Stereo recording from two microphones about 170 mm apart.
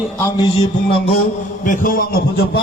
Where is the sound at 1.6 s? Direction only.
50° left (ahead or behind).